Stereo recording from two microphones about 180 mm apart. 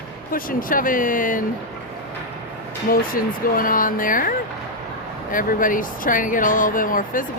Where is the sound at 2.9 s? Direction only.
55° left (ahead or behind).